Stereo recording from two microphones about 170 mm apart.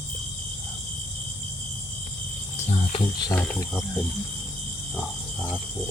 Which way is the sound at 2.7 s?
35° left (ahead or behind).